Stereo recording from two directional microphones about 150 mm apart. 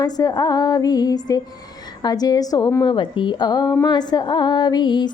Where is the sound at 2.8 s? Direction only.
35° left (ahead or behind).